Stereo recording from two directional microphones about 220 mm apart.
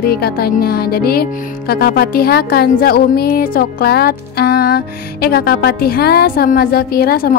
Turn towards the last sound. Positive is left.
turn(degrees=45)  # may be behind; listen again after turning